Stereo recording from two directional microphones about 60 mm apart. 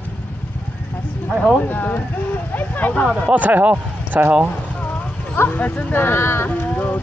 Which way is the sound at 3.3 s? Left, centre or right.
Right.